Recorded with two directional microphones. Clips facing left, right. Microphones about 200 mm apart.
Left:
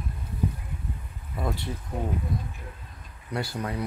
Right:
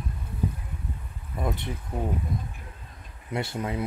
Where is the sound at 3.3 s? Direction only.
25° right (ahead or behind).